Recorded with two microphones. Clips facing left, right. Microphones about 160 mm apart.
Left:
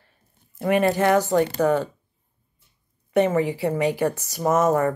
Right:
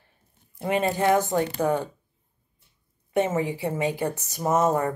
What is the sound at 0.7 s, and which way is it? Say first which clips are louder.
Speech: left 3 dB; 80° left.